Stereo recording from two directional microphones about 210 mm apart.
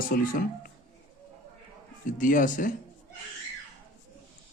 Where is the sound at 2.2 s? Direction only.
40° left (ahead or behind).